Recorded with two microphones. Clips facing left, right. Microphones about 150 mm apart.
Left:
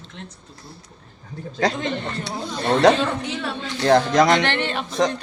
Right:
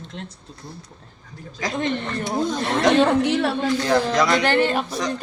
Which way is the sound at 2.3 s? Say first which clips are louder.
Right 7 dB; 45° right (ahead or behind).